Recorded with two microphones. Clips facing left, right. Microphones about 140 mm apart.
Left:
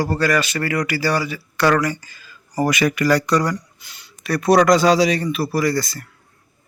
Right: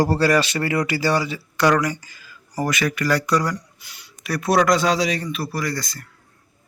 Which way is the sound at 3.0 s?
5° right (ahead or behind).